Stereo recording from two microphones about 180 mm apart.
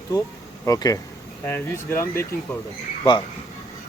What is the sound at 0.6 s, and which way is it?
Speech, 20° left (ahead or behind).